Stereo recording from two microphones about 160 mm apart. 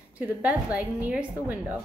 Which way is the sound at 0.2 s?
10° right (ahead or behind).